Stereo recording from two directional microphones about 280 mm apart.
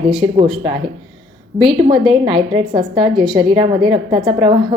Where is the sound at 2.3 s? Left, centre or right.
Centre.